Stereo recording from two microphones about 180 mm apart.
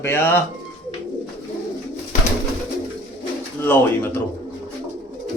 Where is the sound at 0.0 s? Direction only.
10° left (ahead or behind).